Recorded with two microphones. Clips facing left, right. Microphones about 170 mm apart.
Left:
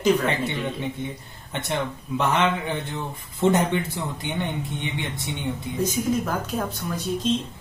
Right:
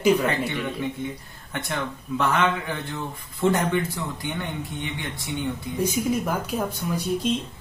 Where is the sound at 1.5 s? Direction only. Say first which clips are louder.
Left 2 dB; 20° left (ahead or behind).